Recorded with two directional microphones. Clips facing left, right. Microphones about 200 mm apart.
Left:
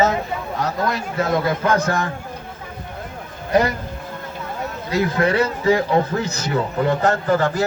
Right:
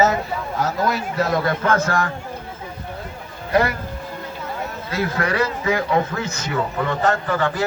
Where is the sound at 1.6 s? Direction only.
15° left (ahead or behind).